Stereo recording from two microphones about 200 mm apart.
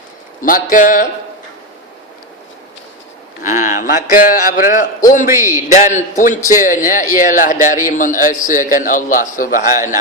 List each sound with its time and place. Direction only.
0.4 s speech: 45° left (ahead or behind)
3.4 s a man's voice: 40° left (ahead or behind)
5.2 s a man's voice: 10° right (ahead or behind)
5.6 s a man's voice: 35° left (ahead or behind)